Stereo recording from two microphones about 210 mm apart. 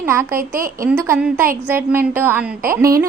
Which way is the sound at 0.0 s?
10° right (ahead or behind).